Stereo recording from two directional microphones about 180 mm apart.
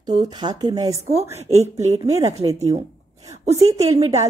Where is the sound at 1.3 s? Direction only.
40° right (ahead or behind).